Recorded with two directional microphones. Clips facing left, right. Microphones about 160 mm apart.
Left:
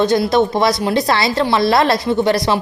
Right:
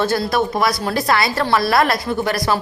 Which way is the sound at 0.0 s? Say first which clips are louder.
Left 5 dB; 20° left (ahead or behind).